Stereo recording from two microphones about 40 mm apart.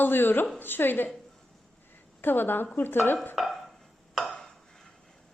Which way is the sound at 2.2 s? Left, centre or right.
Left.